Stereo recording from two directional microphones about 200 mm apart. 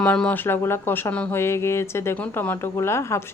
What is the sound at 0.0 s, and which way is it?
Speech, 5° left (ahead or behind).